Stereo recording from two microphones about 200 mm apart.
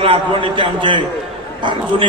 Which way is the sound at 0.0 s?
25° right (ahead or behind).